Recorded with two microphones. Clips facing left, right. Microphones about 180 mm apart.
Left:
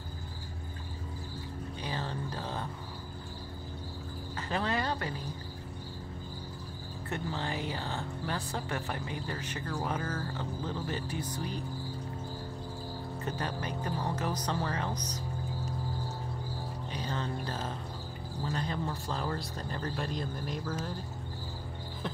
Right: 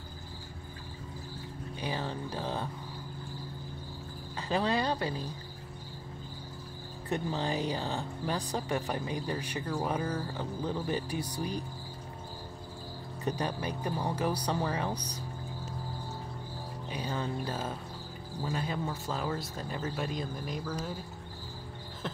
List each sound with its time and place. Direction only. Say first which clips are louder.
1.8 s speech: right 3 dB; 10° right (ahead or behind)
4.4 s speech: right 3 dB; 15° right (ahead or behind)
7.1 s speech: right 4 dB; 20° right (ahead or behind)
13.2 s speech: right 4 dB; 15° right (ahead or behind)
16.9 s speech: right 2 dB; 10° right (ahead or behind)